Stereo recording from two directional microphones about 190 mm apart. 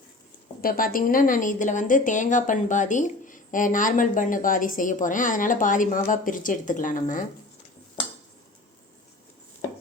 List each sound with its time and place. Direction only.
0.6 s a woman's voice: 50° left (ahead or behind)